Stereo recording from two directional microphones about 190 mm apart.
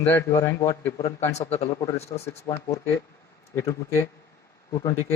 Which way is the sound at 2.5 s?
15° left (ahead or behind).